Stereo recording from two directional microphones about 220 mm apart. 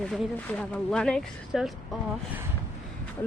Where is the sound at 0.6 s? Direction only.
5° left (ahead or behind).